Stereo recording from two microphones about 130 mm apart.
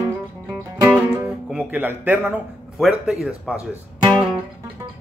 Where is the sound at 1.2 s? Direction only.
10° right (ahead or behind).